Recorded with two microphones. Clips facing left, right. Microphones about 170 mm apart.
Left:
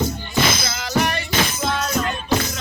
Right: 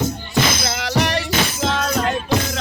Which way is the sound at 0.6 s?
70° right (ahead or behind).